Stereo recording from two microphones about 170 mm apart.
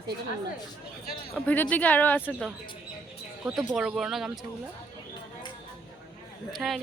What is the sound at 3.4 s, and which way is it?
Speech, centre (ahead or behind).